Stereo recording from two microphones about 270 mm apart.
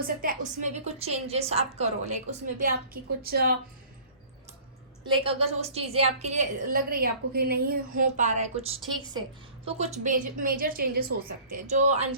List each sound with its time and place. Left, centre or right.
0.0 s a woman's voice: right
5.0 s a woman's voice: centre